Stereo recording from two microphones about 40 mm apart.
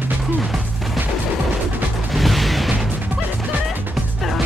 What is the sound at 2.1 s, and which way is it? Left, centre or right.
Music, centre.